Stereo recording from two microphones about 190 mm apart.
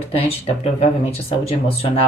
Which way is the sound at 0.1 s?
30° left (ahead or behind).